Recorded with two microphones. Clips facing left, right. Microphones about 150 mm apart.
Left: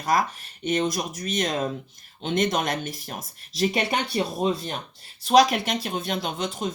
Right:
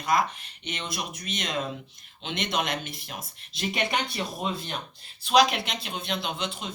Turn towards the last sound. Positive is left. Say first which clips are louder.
# left 4 dB
turn(degrees=45)  # may be behind; listen again after turning